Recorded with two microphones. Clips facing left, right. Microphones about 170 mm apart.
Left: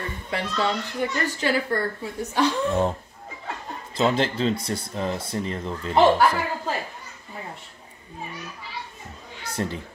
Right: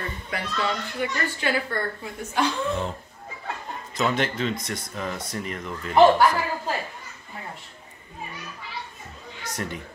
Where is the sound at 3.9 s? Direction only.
30° left (ahead or behind).